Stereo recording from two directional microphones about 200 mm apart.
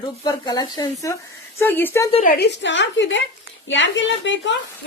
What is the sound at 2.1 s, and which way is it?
Speech, 35° left (ahead or behind).